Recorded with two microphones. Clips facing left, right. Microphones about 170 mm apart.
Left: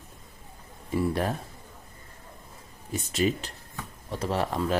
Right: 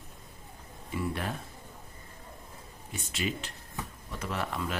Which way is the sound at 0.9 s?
40° left (ahead or behind).